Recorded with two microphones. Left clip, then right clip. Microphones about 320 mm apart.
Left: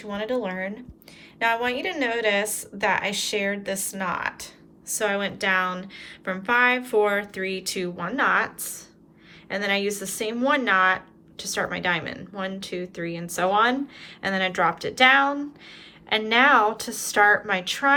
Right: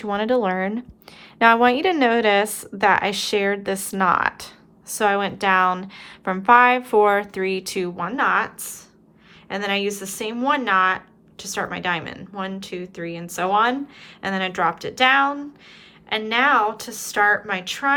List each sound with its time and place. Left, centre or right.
0.0 s speech: centre